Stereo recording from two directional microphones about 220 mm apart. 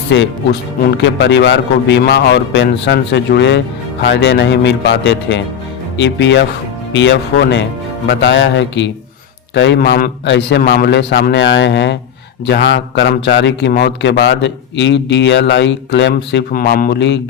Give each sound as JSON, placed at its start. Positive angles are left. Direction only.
{"t": 0.1, "sound": "a man's voice", "side_deg": 55}